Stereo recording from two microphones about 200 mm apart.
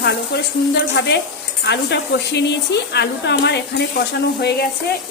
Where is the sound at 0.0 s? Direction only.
55° left (ahead or behind).